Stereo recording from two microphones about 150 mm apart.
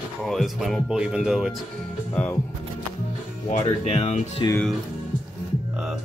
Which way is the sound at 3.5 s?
40° left (ahead or behind).